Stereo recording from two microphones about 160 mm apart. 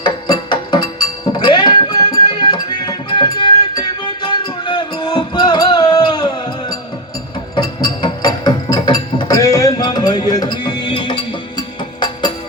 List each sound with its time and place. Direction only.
0.0 s music: 30° left (ahead or behind)